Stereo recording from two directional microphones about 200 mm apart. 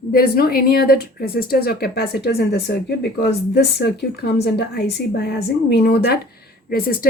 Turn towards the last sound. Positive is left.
turn(degrees=50)  # may be behind; listen again after turning